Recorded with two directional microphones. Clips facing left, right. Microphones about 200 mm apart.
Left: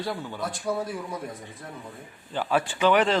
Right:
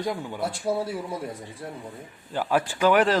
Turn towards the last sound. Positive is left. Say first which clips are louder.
# right 1 dB
turn(degrees=-5)  # may be behind; listen again after turning